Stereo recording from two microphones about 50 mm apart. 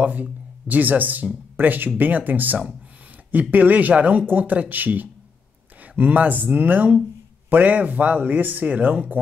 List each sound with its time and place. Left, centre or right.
0.0 s speech: right